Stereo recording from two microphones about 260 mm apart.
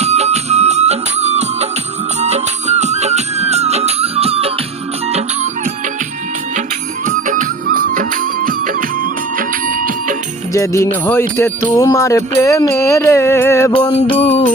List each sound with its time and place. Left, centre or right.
0.0 s music: right
7.0 s music: right
10.5 s music: centre
14.2 s music: left